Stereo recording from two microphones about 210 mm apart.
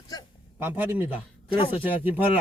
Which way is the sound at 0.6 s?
10° right (ahead or behind).